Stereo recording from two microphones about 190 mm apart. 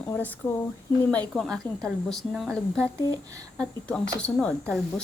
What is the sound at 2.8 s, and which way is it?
Speech, 15° right (ahead or behind).